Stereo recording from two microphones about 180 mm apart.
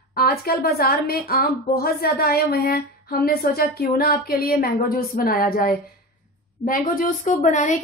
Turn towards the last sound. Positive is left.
turn(degrees=45)  # may be behind; listen again after turning